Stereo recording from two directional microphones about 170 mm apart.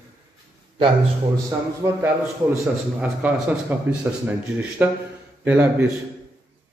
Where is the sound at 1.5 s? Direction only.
20° right (ahead or behind).